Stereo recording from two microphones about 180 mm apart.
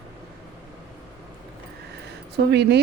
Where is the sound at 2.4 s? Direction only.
60° right (ahead or behind).